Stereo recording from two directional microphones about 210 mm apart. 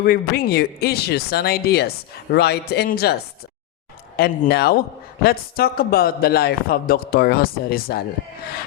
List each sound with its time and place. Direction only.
0.0 s a man's voice: 45° left (ahead or behind)
4.2 s a man's voice: 50° left (ahead or behind)